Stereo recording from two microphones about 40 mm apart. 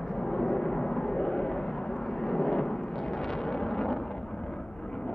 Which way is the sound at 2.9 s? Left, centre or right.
Centre.